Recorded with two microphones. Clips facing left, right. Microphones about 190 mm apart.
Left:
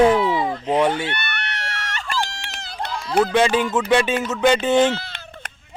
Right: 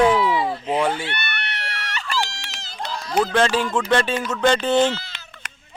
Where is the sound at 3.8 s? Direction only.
5° left (ahead or behind).